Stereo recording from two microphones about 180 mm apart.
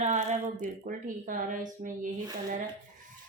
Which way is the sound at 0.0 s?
40° right (ahead or behind).